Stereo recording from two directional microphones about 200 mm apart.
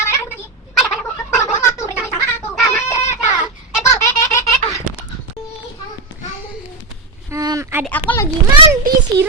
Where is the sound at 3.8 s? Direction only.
15° left (ahead or behind).